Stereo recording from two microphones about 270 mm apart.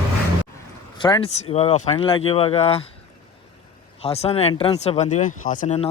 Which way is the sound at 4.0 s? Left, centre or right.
Left.